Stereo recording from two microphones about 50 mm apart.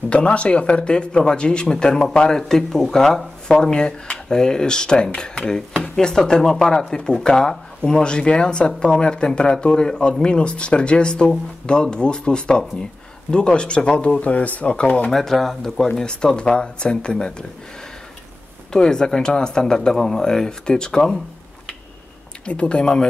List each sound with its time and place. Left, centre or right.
0.1 s speech: left
15.0 s speech: centre
18.7 s speech: centre
22.4 s speech: left